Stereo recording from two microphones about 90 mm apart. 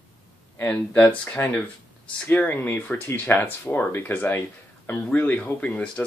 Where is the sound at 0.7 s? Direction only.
15° left (ahead or behind).